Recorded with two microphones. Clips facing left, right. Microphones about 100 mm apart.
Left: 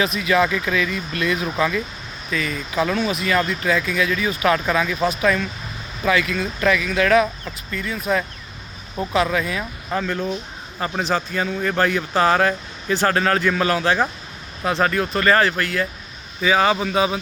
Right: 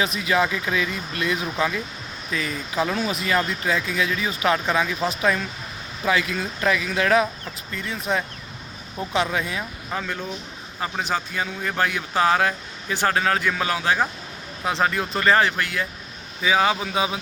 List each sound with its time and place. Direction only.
0.0 s speech: 25° right (ahead or behind)
2.8 s speech: 15° right (ahead or behind)
3.1 s speech: 30° right (ahead or behind)
9.9 s speech: 5° right (ahead or behind)